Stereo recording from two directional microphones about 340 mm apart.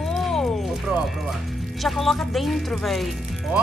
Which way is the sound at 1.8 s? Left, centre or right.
Centre.